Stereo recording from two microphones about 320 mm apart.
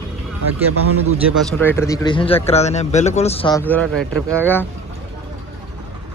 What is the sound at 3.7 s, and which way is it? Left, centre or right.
Speech, centre.